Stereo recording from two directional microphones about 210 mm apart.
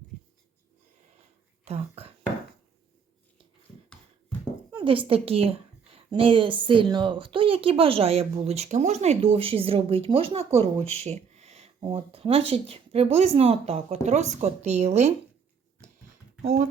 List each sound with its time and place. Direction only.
1.6 s speech: 30° right (ahead or behind)
4.7 s a woman's voice: 25° right (ahead or behind)